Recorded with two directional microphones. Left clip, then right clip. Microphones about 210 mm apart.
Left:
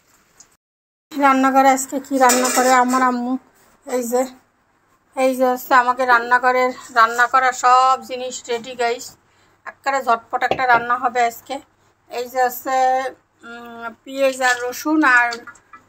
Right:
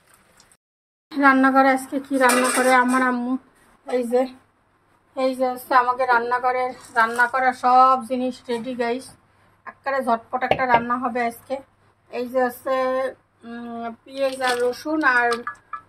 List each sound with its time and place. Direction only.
1.1 s speech: 5° left (ahead or behind)
3.9 s a woman's voice: 15° left (ahead or behind)